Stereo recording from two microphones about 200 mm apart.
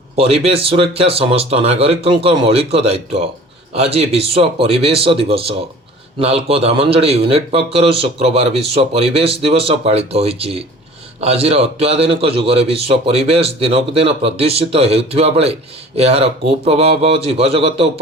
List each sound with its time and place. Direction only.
0.2 s a man's voice: 30° right (ahead or behind)